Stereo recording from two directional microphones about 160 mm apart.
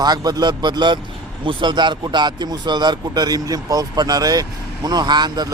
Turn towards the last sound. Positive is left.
turn(degrees=-25)  # may be behind; listen again after turning